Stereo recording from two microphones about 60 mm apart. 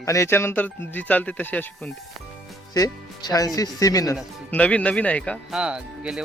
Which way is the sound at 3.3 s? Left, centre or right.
Left.